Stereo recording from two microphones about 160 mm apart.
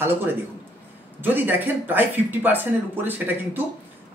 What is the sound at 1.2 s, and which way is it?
Speech, 10° right (ahead or behind).